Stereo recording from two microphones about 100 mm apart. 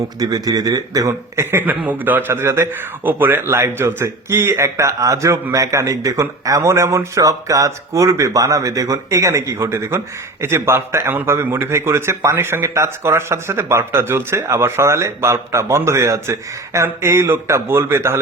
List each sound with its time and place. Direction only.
0.2 s a man's voice: 40° right (ahead or behind)